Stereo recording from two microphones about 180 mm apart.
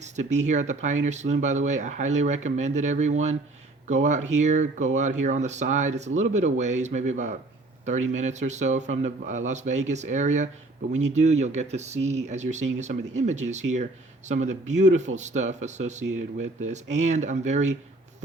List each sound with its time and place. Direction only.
0.0 s speech: 40° right (ahead or behind)